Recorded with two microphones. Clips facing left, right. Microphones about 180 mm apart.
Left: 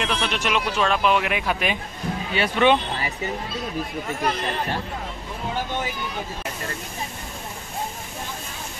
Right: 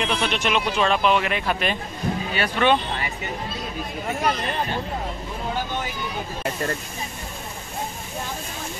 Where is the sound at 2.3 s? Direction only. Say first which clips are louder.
Left 2 dB; 20° left (ahead or behind).